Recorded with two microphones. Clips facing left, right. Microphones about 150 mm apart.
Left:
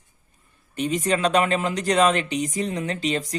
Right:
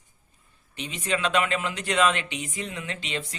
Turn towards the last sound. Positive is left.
turn(degrees=40)  # may be behind; listen again after turning